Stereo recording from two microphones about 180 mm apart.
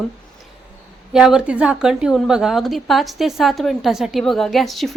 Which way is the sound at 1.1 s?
5° right (ahead or behind).